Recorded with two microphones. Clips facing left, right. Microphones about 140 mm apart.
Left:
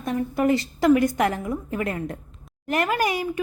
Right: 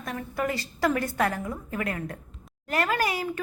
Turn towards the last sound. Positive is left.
turn(degrees=15)  # may be behind; listen again after turning